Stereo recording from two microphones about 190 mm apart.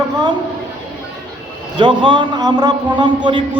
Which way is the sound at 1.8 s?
25° right (ahead or behind).